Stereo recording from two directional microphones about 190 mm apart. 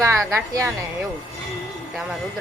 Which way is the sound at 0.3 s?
15° right (ahead or behind).